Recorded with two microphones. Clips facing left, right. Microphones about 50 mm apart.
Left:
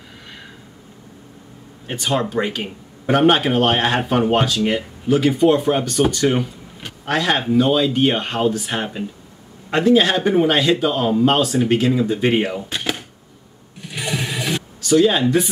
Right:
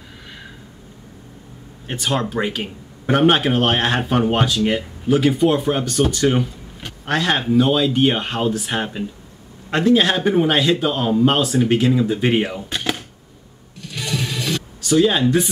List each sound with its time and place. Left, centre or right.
1.9 s speech: centre
13.7 s mechanisms: centre
14.8 s speech: centre